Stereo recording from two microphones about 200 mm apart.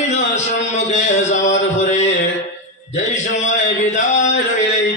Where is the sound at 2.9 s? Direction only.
35° left (ahead or behind).